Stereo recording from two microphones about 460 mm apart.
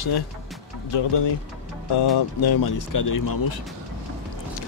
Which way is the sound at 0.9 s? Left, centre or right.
Left.